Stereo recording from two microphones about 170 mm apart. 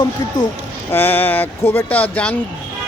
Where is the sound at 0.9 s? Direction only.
15° left (ahead or behind).